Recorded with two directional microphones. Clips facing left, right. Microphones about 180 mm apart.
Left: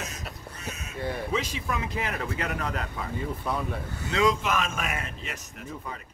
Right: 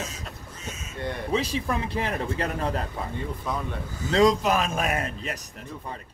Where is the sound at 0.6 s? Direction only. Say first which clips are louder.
Even; 65° left (ahead or behind).